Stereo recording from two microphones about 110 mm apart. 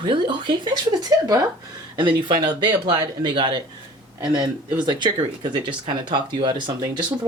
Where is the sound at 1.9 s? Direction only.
45° right (ahead or behind).